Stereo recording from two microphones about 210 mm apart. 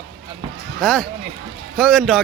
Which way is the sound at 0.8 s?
Centre (ahead or behind).